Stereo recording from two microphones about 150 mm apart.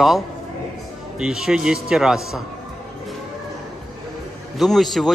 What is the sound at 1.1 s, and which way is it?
A man's voice, 5° right (ahead or behind).